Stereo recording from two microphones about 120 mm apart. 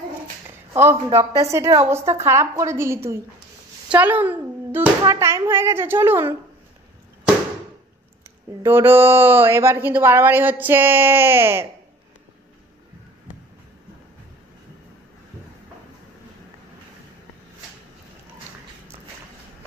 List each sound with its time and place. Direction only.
1.1 s speech: 25° right (ahead or behind)
8.6 s speech: 20° right (ahead or behind)